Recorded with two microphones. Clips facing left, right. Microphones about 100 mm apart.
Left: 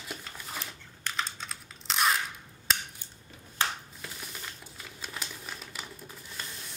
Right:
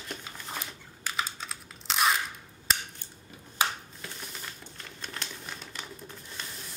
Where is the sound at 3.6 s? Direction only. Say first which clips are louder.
Right 2 dB; 15° right (ahead or behind).